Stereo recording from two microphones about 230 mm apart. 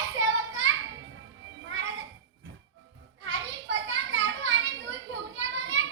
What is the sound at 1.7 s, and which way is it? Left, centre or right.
Children playing, right.